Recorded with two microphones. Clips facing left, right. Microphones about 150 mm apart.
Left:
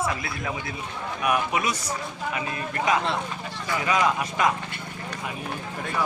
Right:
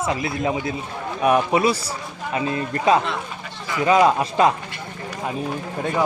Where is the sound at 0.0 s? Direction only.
20° right (ahead or behind).